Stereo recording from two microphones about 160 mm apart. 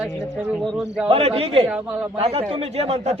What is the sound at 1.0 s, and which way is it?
A man's voice, 35° right (ahead or behind).